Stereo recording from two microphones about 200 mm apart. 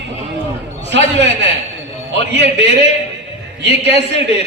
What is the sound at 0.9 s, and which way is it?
Speech, 60° right (ahead or behind).